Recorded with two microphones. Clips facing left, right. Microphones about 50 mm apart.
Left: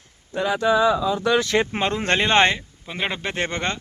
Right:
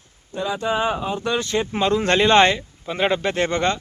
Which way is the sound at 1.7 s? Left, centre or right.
Left.